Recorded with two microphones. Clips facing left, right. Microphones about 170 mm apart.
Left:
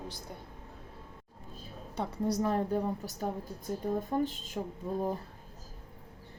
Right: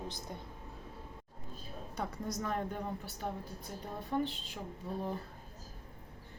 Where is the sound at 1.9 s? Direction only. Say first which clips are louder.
Left 7 dB; 30° left (ahead or behind).